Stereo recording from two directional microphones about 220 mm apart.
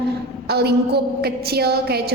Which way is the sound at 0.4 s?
45° right (ahead or behind).